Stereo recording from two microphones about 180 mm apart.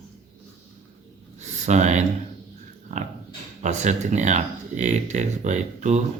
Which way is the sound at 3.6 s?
40° right (ahead or behind).